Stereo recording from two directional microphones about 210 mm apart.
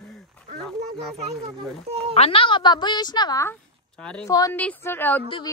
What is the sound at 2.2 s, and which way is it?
A woman's voice, 25° left (ahead or behind).